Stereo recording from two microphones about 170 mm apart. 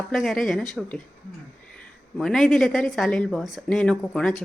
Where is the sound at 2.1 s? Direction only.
Centre (ahead or behind).